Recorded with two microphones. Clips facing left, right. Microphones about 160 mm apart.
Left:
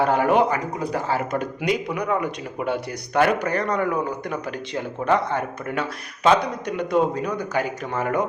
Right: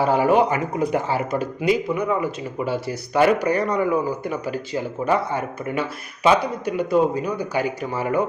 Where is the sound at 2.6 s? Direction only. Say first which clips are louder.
Right 1 dB; 60° left (ahead or behind).